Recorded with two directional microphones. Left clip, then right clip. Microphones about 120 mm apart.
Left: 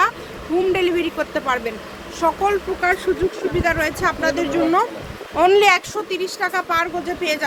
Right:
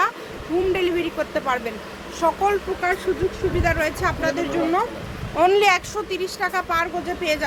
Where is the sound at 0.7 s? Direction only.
30° left (ahead or behind).